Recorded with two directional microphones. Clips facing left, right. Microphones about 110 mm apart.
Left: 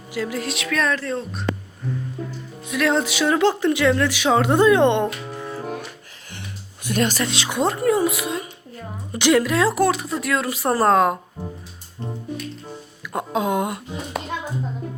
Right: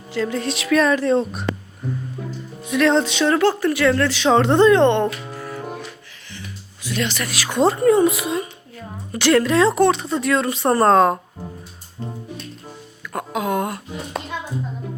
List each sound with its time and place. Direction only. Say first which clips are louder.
0.1 s speech: right 3 dB; 10° left (ahead or behind)
0.9 s speech: right 8 dB; 15° right (ahead or behind)
2.6 s speech: right 4 dB; 5° left (ahead or behind)
5.4 s music: even; 25° left (ahead or behind)
6.8 s speech: left 3 dB; 45° left (ahead or behind)
7.2 s speech: left 2 dB; 25° left (ahead or behind)
7.6 s speech: right 5 dB; centre (ahead or behind)
9.1 s speech: right 2 dB; 15° left (ahead or behind)
13.1 s speech: left 1 dB; 20° left (ahead or behind)